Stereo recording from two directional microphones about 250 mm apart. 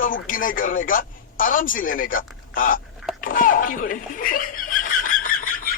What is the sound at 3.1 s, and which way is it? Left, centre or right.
Snicker, left.